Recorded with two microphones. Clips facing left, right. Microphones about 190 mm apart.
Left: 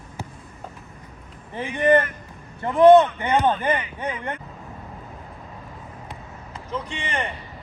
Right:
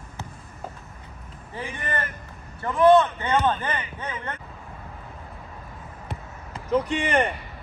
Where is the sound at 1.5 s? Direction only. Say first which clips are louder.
Left 12 dB; 20° left (ahead or behind).